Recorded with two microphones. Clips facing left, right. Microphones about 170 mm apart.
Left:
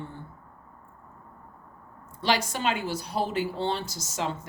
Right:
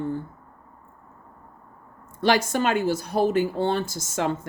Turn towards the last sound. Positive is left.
turn(degrees=-50)  # may be behind; listen again after turning